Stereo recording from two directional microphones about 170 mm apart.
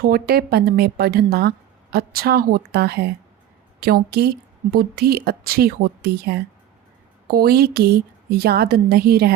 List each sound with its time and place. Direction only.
0.1 s a woman's voice: 65° right (ahead or behind)